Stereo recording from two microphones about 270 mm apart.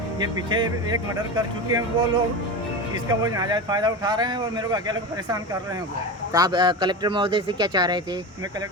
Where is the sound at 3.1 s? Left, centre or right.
Centre.